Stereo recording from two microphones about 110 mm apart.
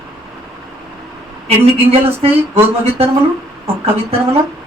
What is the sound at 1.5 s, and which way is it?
Speech, 65° right (ahead or behind).